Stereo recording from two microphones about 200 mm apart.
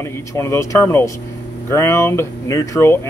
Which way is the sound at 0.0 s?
15° left (ahead or behind).